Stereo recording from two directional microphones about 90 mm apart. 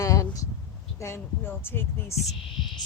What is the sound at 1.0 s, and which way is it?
Speech, 25° left (ahead or behind).